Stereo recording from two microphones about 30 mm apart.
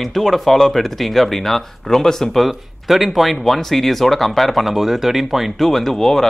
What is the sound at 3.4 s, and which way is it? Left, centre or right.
Speech, centre.